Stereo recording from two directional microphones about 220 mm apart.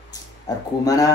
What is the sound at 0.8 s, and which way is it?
Speech, 15° left (ahead or behind).